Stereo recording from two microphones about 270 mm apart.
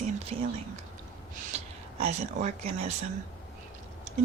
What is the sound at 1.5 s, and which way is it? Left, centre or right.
Speech, right.